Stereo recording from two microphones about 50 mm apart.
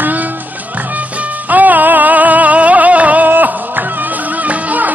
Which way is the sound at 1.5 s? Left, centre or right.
Right.